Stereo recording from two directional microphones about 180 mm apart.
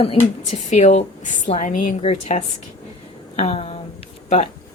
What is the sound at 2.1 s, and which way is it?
Speech, 35° left (ahead or behind).